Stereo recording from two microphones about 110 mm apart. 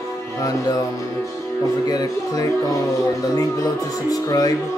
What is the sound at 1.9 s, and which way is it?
Speech, 35° left (ahead or behind).